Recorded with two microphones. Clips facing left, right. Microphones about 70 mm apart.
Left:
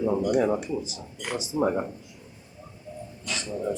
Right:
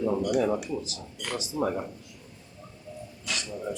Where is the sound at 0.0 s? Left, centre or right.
Centre.